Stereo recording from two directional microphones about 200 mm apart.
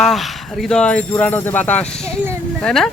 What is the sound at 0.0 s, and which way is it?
Speech, centre (ahead or behind).